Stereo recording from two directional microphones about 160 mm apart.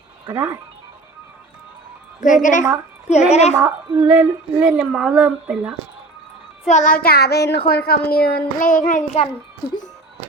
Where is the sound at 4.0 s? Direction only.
10° right (ahead or behind).